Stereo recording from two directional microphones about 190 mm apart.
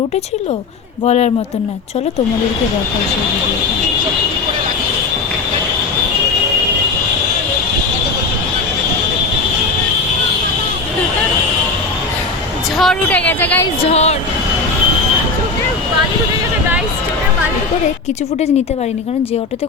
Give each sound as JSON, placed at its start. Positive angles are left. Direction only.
{"t": 1.0, "sound": "speech", "side_deg": 35}
{"t": 12.7, "sound": "speech", "side_deg": 0}
{"t": 13.9, "sound": "speech", "side_deg": 35}